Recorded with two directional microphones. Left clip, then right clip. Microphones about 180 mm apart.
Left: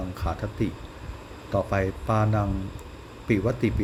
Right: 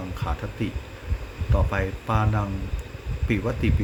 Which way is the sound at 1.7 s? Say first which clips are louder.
Right 1 dB; 15° left (ahead or behind).